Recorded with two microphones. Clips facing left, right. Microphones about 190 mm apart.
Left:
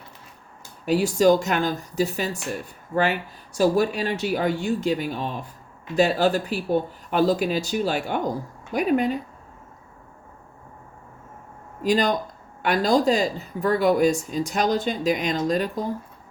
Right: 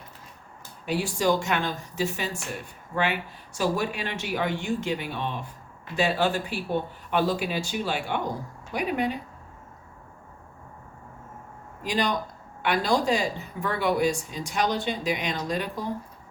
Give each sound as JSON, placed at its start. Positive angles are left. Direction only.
{"t": 0.9, "sound": "speech", "side_deg": 40}
{"t": 11.8, "sound": "speech", "side_deg": 45}